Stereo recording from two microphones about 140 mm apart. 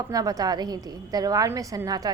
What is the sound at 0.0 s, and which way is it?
A woman's voice, 25° right (ahead or behind).